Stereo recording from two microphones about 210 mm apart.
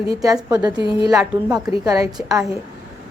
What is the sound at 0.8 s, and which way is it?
Speech, 20° left (ahead or behind).